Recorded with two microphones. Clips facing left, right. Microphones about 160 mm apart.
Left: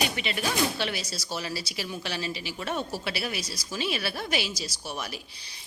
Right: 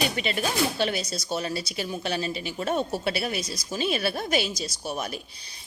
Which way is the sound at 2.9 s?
30° right (ahead or behind).